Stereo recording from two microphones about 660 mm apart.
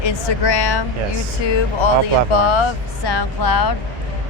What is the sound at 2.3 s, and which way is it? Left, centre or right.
Speech, left.